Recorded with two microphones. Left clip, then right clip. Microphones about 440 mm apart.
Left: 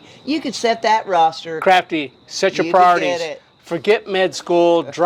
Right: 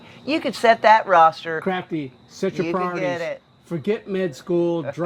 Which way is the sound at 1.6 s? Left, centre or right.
Left.